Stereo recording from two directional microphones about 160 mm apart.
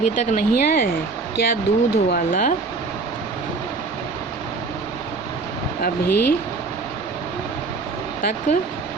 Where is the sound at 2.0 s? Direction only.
60° left (ahead or behind).